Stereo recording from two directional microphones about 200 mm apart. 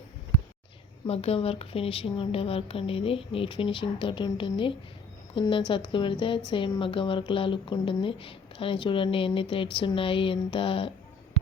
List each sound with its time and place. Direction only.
1.0 s a woman's voice: 30° left (ahead or behind)